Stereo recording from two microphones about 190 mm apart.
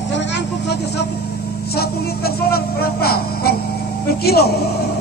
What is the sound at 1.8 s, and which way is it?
Speech, 55° left (ahead or behind).